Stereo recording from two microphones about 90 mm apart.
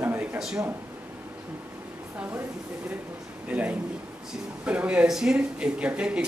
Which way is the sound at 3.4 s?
15° right (ahead or behind).